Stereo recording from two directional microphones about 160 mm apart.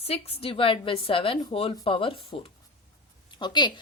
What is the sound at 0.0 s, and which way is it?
A woman's voice, 40° left (ahead or behind).